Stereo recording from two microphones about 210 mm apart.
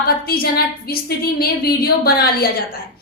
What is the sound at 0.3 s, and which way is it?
A woman's voice, 45° left (ahead or behind).